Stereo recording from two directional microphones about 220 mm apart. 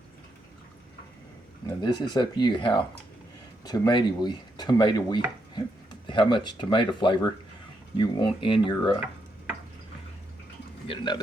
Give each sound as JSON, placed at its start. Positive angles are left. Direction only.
{"t": 1.6, "sound": "speech", "side_deg": 20}
{"t": 10.8, "sound": "speech", "side_deg": 20}